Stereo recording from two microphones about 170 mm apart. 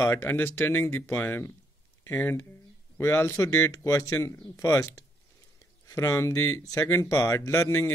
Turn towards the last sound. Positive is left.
turn(degrees=15)  # may be behind; listen again after turning